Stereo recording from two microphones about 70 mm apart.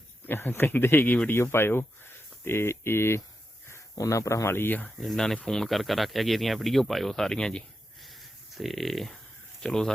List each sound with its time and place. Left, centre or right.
0.3 s speech: left
3.9 s speech: left
4.9 s speech: centre
8.0 s a sound: centre
9.6 s speech: centre